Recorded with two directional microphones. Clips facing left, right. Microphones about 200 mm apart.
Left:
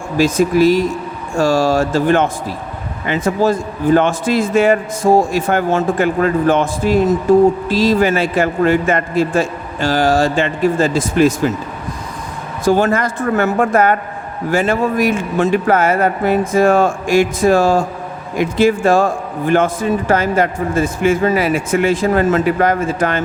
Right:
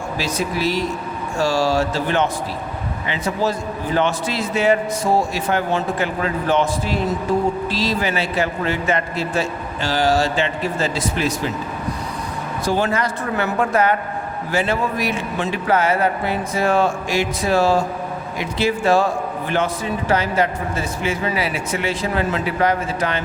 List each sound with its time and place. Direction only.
0.2 s a man's voice: 50° left (ahead or behind)
12.6 s a man's voice: 50° left (ahead or behind)